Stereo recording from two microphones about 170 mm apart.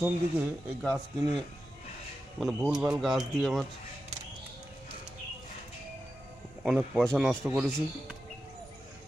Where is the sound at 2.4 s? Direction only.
5° right (ahead or behind).